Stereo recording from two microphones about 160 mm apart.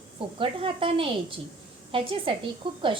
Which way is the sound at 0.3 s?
35° right (ahead or behind).